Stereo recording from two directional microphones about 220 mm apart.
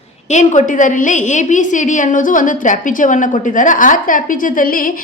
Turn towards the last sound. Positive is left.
turn(degrees=40)  # may be behind; listen again after turning